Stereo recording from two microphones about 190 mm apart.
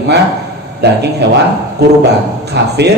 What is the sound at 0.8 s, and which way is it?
Speech, 60° right (ahead or behind).